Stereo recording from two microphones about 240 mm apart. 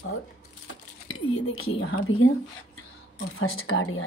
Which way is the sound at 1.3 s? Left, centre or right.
Left.